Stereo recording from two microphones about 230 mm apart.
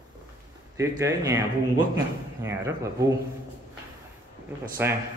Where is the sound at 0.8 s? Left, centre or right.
Centre.